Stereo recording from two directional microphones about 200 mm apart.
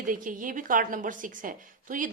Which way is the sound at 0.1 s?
40° right (ahead or behind).